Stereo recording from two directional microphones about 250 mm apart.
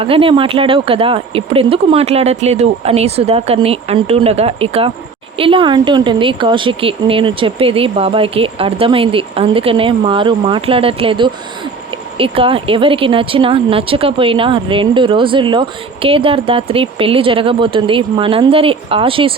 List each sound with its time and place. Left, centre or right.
0.0 s speech: right